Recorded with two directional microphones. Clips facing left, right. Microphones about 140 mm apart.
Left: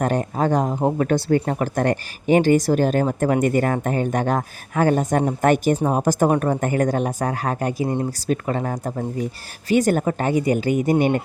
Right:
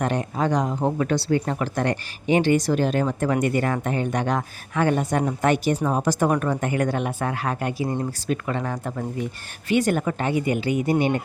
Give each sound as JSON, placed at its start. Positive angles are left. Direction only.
{"t": 0.0, "sound": "speech", "side_deg": 45}